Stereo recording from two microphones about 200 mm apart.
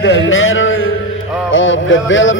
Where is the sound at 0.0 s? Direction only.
65° left (ahead or behind).